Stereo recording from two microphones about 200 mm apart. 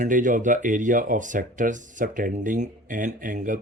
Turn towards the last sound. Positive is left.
turn(degrees=-40)  # may be behind; listen again after turning